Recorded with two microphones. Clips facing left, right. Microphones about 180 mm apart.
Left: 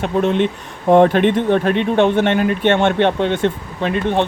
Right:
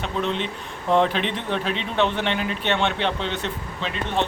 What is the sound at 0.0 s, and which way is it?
Speech, 50° left (ahead or behind).